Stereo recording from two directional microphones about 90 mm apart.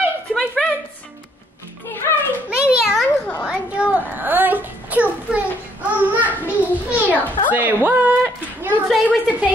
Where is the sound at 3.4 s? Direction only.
10° right (ahead or behind).